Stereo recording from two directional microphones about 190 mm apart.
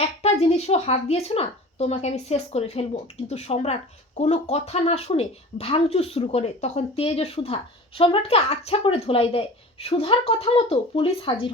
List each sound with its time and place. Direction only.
0.0 s speech: 35° left (ahead or behind)